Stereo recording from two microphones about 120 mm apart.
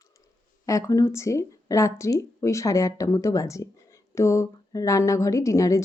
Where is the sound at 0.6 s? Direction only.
25° left (ahead or behind).